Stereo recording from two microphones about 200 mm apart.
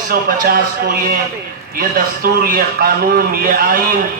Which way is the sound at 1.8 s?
45° right (ahead or behind).